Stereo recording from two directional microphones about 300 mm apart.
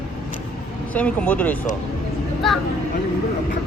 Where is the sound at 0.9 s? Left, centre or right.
Centre.